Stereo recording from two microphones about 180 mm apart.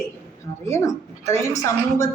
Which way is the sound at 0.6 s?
15° left (ahead or behind).